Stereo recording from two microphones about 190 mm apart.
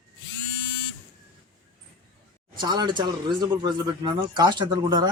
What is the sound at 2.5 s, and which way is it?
Speech, 25° right (ahead or behind).